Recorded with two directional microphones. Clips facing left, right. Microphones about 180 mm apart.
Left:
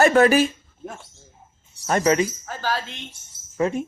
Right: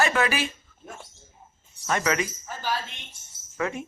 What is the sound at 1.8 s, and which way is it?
Speech, 40° left (ahead or behind).